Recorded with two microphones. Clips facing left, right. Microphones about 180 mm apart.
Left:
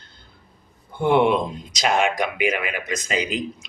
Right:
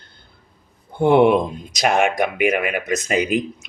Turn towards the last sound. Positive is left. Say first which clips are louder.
# right 6 dB
turn(degrees=-55)  # may be behind; listen again after turning